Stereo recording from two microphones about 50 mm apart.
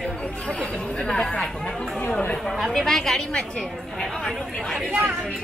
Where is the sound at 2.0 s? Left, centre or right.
Left.